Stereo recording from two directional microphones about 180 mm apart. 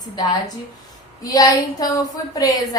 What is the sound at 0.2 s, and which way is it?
A woman's voice, 20° left (ahead or behind).